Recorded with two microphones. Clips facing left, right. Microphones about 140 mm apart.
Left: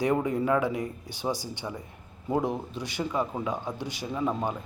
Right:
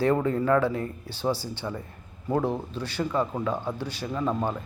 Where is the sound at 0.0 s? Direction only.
15° left (ahead or behind).